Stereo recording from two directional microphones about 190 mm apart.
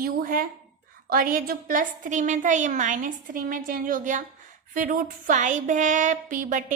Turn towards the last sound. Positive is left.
turn(degrees=-45)  # may be behind; listen again after turning